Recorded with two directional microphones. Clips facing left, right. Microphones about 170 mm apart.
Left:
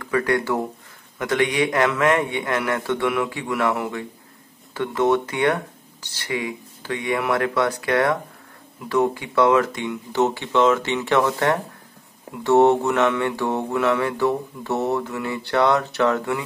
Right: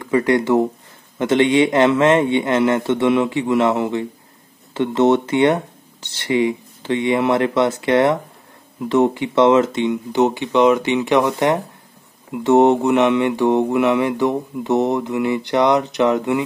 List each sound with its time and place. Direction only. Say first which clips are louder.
0.0 s a man's voice: right 5 dB; 20° right (ahead or behind)
12.4 s mantra: right 3 dB; 20° right (ahead or behind)